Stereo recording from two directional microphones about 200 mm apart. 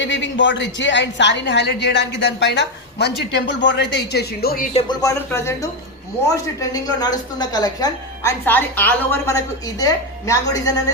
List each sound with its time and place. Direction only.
0.0 s a woman's voice: 65° left (ahead or behind); by 4.7 s 50° left (ahead or behind)
4.9 s speech: 15° left (ahead or behind)